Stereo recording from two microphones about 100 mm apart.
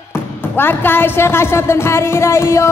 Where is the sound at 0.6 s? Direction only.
20° left (ahead or behind).